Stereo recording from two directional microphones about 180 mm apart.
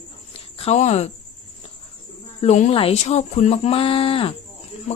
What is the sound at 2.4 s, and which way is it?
Speech, 40° left (ahead or behind).